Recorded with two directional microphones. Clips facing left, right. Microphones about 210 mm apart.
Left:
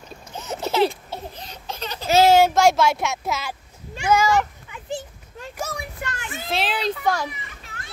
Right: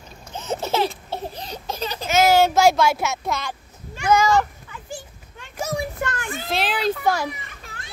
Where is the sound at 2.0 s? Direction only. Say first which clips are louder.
Left 2 dB; 35° left (ahead or behind).